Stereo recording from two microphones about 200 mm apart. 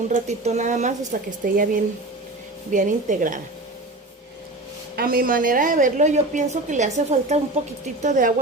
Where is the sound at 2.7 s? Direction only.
40° right (ahead or behind).